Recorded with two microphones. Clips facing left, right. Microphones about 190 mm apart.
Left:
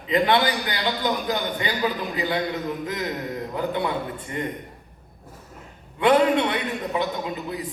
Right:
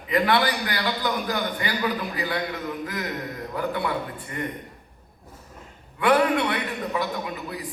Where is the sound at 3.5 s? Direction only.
20° left (ahead or behind).